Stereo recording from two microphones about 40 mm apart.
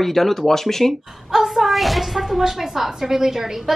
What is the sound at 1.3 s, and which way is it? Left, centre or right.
Speech, centre.